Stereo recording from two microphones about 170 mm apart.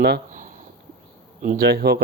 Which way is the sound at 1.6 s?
65° right (ahead or behind).